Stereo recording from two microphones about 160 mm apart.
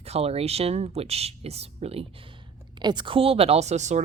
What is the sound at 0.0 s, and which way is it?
Speech, 40° right (ahead or behind).